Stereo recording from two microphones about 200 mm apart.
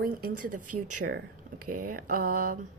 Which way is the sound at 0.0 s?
45° right (ahead or behind).